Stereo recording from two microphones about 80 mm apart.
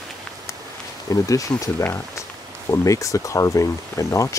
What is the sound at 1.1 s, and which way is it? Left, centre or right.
Speech, left.